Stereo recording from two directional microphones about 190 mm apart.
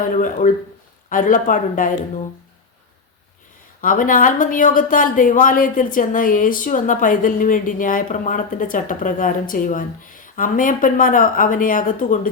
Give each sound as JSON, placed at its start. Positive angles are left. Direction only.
{"t": 0.1, "sound": "speech", "side_deg": 45}
{"t": 3.8, "sound": "speech", "side_deg": 45}